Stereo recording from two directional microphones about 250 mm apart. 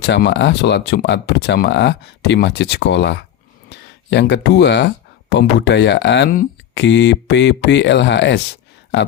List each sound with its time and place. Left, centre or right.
0.0 s speech: left